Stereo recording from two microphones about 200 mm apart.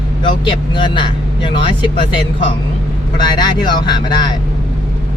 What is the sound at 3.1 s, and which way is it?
Speech, 20° left (ahead or behind).